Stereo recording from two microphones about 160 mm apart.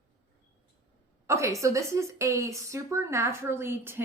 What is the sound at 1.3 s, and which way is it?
A woman's voice, 20° right (ahead or behind).